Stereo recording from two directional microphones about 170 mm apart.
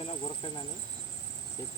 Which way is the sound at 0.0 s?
35° left (ahead or behind).